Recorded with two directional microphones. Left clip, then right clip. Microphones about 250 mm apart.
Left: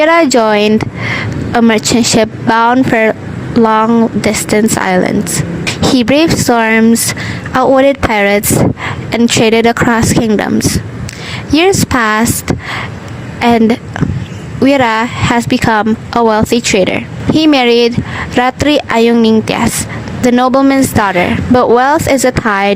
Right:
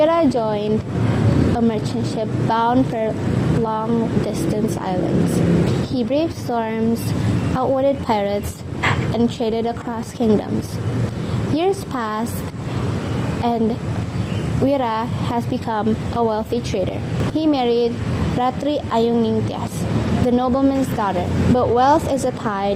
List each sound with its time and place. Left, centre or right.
0.0 s speech: left
6.0 s speech: left
11.5 s speech: left
13.4 s speech: left